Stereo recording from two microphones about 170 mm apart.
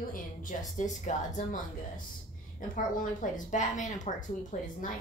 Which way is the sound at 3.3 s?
45° left (ahead or behind).